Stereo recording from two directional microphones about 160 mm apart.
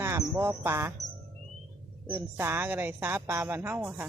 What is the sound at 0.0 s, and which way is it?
Speech, 15° right (ahead or behind).